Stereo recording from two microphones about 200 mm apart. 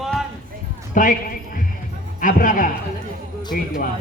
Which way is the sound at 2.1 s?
40° left (ahead or behind).